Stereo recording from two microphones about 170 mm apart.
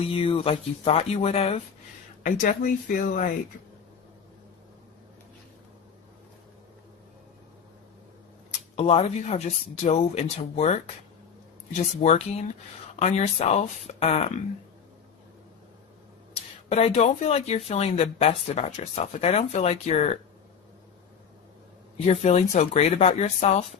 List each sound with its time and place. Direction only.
0.0 s speech: 35° left (ahead or behind)
2.2 s speech: 55° left (ahead or behind)
8.7 s speech: 35° left (ahead or behind)
12.0 s speech: 40° left (ahead or behind)
16.6 s speech: 35° left (ahead or behind)
22.0 s speech: 40° left (ahead or behind)